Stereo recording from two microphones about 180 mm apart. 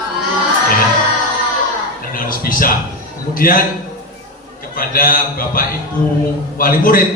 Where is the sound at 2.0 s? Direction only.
50° left (ahead or behind).